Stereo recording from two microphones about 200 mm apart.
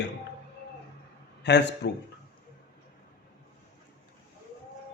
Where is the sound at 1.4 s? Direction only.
60° left (ahead or behind).